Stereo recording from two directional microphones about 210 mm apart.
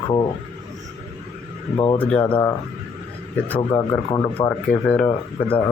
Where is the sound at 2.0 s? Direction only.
5° left (ahead or behind).